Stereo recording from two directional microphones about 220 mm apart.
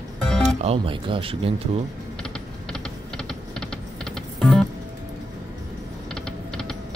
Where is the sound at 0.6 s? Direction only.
25° right (ahead or behind).